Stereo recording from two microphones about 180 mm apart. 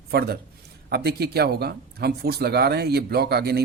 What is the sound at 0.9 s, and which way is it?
Speech, 60° right (ahead or behind).